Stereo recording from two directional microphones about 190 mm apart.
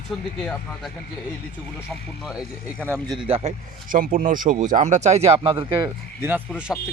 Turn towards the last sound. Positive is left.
turn(degrees=-5)  # may be behind; listen again after turning